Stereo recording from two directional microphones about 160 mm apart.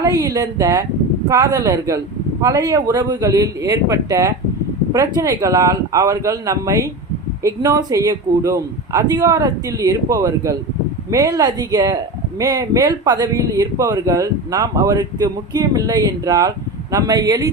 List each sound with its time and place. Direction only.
0.0 s speech: 20° right (ahead or behind)